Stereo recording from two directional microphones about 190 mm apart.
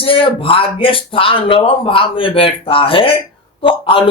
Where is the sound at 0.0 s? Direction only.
25° left (ahead or behind).